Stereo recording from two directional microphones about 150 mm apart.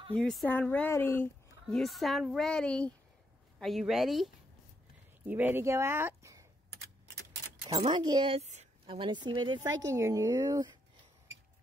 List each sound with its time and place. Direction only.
0.1 s speech: 5° left (ahead or behind)
1.8 s speech: centre (ahead or behind)
5.2 s speech: 10° right (ahead or behind)
7.8 s a woman's voice: 30° right (ahead or behind); by 8.6 s 45° right (ahead or behind)
8.8 s a woman's voice: 35° right (ahead or behind)